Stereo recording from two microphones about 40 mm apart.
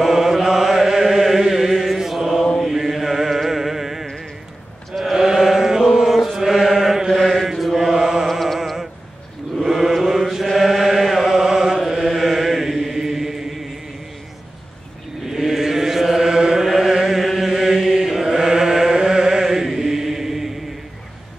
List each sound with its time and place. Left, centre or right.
0.0 s chant: centre
2.4 s mantra: centre
2.7 s music: centre
5.1 s mantra: centre
7.1 s chant: centre
8.3 s music: centre
9.7 s chant: centre
15.2 s chant: centre
16.6 s chant: centre
16.9 s chant: centre